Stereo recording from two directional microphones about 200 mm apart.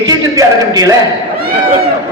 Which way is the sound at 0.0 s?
20° right (ahead or behind).